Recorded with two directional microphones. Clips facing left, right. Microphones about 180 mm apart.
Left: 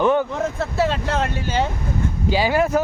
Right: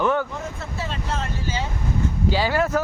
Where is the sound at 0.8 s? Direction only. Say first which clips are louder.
Left 8 dB; 80° left.